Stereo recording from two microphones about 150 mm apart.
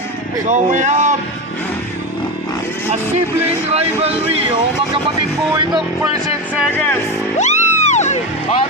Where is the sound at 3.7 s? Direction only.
45° right (ahead or behind).